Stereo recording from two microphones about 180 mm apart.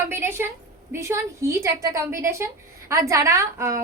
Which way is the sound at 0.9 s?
15° right (ahead or behind).